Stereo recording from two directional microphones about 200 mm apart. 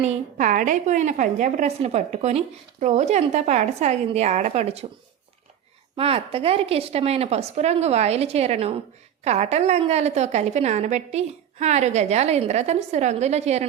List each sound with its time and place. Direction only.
0.0 s a woman's voice: 35° right (ahead or behind)
6.0 s a woman's voice: 30° right (ahead or behind)